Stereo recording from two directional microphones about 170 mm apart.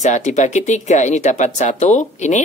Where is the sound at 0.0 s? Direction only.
45° left (ahead or behind).